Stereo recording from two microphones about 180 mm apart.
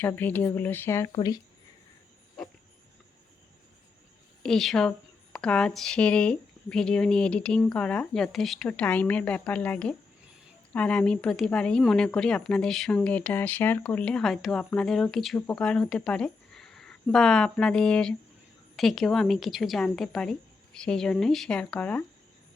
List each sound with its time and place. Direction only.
0.0 s speech: 10° left (ahead or behind)
4.4 s speech: centre (ahead or behind)